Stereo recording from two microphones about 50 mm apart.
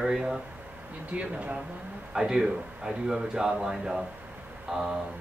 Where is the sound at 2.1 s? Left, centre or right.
Centre.